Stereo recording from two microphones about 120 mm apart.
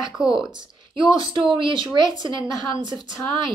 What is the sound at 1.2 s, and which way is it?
A woman's voice, 40° right (ahead or behind).